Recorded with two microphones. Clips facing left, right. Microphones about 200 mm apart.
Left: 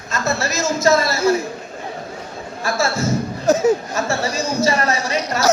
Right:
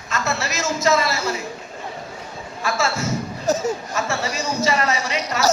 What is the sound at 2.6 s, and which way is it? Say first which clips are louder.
Speech: left 3 dB; 40° left (ahead or behind).